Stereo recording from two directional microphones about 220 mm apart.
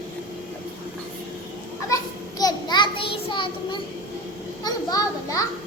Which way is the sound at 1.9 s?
15° left (ahead or behind).